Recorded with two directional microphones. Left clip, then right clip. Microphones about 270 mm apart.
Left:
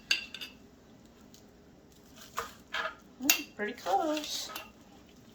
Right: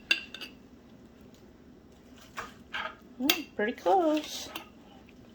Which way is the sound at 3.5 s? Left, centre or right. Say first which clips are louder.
Right 6 dB; right.